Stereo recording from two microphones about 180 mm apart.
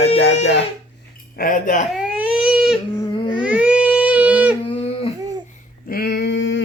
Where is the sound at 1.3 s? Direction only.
50° left (ahead or behind).